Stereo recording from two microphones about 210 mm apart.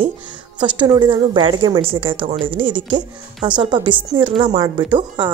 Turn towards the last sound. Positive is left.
turn(degrees=-20)  # may be behind; listen again after turning